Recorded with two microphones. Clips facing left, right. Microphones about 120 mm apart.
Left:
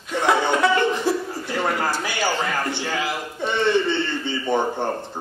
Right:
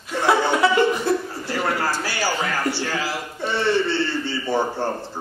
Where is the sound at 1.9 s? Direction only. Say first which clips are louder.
Left 1 dB; 20° left (ahead or behind).